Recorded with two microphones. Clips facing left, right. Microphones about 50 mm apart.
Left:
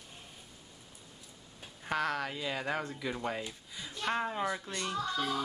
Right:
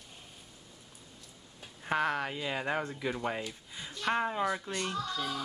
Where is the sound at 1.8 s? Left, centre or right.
Centre.